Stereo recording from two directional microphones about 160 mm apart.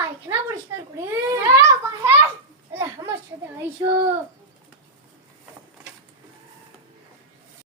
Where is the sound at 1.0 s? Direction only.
20° right (ahead or behind).